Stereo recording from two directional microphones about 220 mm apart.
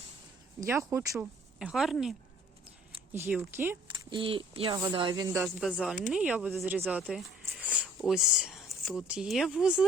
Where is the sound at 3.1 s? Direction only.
10° right (ahead or behind).